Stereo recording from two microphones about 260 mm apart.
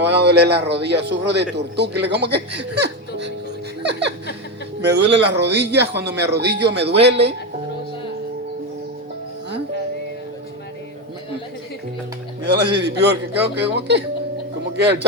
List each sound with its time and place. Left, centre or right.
0.0 s speech: right
4.8 s speech: right
12.4 s speech: right